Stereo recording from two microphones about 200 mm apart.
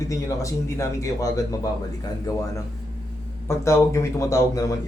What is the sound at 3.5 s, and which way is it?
Speech, 15° left (ahead or behind).